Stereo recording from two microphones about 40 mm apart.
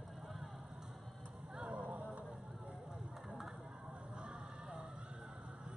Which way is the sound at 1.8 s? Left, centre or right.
Right.